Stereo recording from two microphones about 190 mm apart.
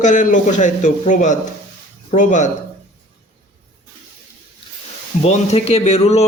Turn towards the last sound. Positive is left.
turn(degrees=35)  # may be behind; listen again after turning